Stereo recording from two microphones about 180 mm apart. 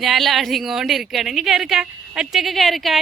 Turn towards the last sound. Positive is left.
turn(degrees=0)  # may be behind; listen again after turning